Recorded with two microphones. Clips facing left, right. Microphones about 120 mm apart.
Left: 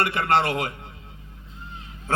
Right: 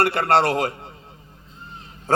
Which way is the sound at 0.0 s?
35° right (ahead or behind).